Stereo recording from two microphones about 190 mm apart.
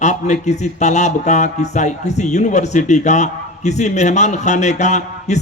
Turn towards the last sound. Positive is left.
turn(degrees=35)  # may be behind; listen again after turning